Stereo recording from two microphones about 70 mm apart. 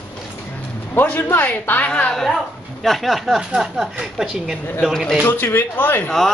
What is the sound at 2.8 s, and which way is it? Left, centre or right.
Speech, centre.